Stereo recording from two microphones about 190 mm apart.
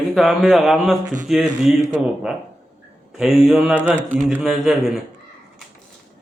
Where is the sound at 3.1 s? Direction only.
Centre (ahead or behind).